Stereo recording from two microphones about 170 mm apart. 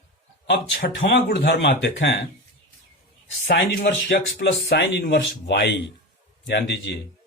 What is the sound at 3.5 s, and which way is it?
Speech, 90° left.